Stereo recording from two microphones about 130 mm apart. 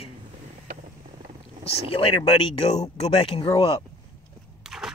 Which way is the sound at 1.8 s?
45° left (ahead or behind).